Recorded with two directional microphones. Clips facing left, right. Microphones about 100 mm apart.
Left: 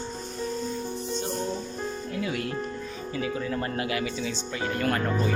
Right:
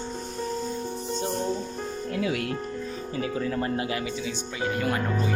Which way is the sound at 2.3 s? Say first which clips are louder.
Right 2 dB; 75° right (ahead or behind).